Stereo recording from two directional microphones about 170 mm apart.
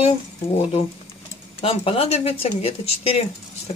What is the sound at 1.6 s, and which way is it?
Speech, 35° left (ahead or behind).